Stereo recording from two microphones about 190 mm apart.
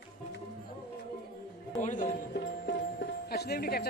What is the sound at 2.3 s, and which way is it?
Music, 60° left (ahead or behind).